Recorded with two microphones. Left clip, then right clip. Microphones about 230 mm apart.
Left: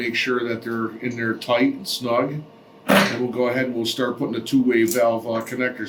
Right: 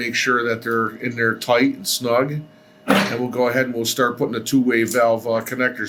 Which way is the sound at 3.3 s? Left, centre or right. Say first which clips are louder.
Right 3 dB; right.